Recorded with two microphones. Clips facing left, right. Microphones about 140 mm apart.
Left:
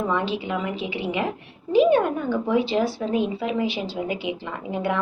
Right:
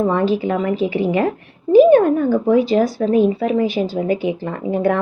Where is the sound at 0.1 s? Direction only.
45° right (ahead or behind).